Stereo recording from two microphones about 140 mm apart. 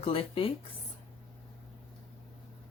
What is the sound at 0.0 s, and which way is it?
Speech, 40° left (ahead or behind).